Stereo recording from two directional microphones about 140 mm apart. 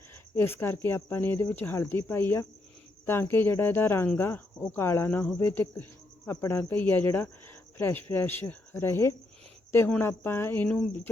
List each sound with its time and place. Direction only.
0.3 s speech: 15° left (ahead or behind)